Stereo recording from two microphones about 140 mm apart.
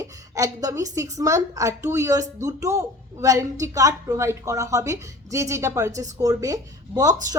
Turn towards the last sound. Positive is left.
turn(degrees=-25)  # may be behind; listen again after turning